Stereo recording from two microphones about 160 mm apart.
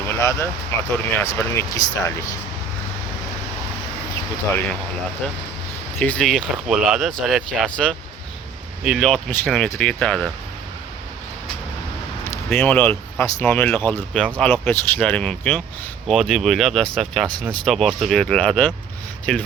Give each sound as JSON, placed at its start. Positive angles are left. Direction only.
{"t": 0.1, "sound": "speech", "side_deg": 15}
{"t": 6.0, "sound": "speech", "side_deg": 5}
{"t": 12.5, "sound": "speech", "side_deg": 5}